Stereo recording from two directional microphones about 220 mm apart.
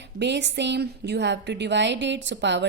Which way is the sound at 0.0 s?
50° right (ahead or behind).